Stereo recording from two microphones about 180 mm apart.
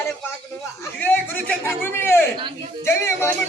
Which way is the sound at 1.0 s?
10° left (ahead or behind).